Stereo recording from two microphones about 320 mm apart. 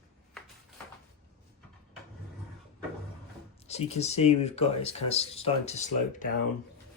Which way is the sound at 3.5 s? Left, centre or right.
Centre.